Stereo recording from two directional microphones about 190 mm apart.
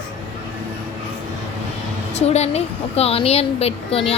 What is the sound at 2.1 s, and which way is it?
A woman's voice, 35° left (ahead or behind).